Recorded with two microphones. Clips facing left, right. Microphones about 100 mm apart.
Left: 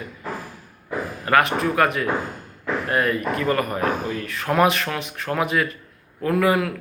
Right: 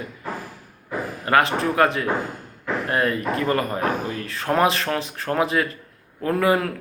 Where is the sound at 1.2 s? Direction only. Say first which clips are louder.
Even; 30° right (ahead or behind).